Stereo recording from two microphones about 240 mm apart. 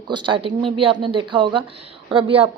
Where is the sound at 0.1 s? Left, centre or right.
Centre.